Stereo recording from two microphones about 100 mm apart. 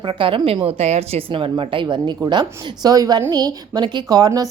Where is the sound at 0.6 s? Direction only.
90° right; by 2.1 s 50° right (ahead or behind).